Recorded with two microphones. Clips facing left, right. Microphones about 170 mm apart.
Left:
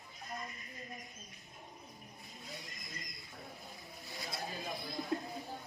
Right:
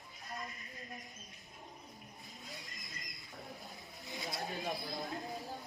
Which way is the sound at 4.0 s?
20° right (ahead or behind).